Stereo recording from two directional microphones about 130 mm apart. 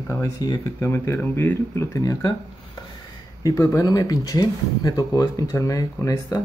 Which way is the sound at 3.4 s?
25° left (ahead or behind).